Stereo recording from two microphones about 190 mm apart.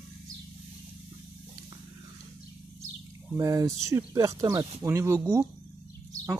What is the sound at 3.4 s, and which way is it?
Speech, 15° right (ahead or behind).